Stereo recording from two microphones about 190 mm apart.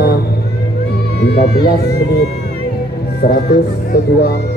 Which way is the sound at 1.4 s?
55° left (ahead or behind).